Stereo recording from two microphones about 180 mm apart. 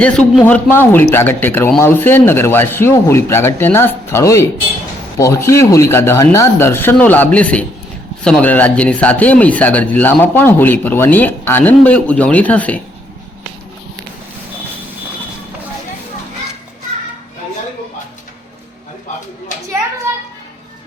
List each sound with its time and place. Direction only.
0.0 s speech: 5° left (ahead or behind)
20.1 s children playing: 15° right (ahead or behind)